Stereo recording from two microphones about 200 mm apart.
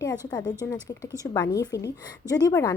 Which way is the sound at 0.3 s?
20° left (ahead or behind).